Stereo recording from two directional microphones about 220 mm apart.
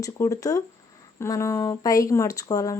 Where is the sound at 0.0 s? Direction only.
15° left (ahead or behind).